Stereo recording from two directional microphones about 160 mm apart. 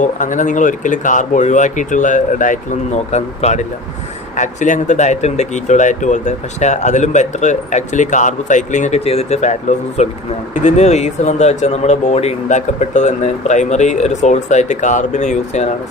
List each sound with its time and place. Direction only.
0.0 s speech: 50° left (ahead or behind)